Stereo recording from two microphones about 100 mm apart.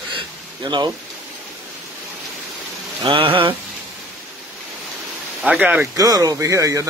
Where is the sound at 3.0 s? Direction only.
65° right (ahead or behind).